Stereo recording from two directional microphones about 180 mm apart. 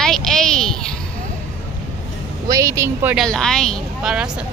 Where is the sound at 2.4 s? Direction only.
20° right (ahead or behind).